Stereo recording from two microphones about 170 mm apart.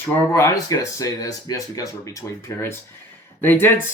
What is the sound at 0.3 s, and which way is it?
A man's voice, 20° left (ahead or behind).